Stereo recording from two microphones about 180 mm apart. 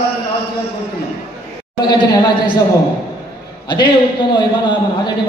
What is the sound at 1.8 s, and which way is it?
Speech, 25° left (ahead or behind).